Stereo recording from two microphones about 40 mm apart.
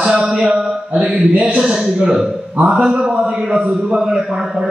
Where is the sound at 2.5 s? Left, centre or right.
Right.